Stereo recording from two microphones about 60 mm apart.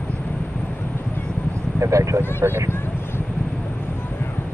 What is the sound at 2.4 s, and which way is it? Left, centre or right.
Speech, right.